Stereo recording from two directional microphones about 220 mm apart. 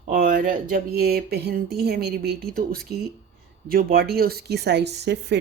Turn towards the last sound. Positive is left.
turn(degrees=-50)  # may be behind; listen again after turning